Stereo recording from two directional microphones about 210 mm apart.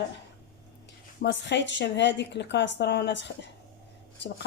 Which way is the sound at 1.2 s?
55° left (ahead or behind).